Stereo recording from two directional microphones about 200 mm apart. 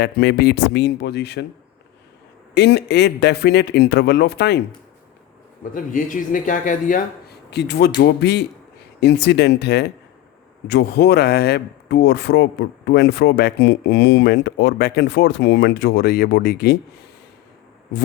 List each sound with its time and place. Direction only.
0.0 s speech: 55° left (ahead or behind)
2.6 s speech: 55° left (ahead or behind)
5.7 s speech: 40° left (ahead or behind)